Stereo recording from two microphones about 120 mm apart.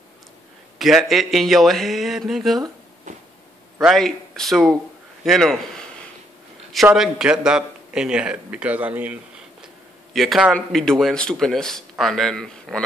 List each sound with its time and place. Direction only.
0.7 s speech: centre (ahead or behind)
3.1 s a sound: 90° right
3.8 s a man's voice: 5° left (ahead or behind)
6.9 s a man's voice: 5° right (ahead or behind)
10.1 s speech: centre (ahead or behind)